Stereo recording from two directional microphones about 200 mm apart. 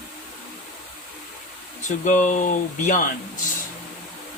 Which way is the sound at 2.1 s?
40° left (ahead or behind).